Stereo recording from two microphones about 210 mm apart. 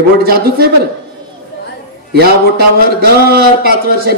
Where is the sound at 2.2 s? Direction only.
45° right (ahead or behind).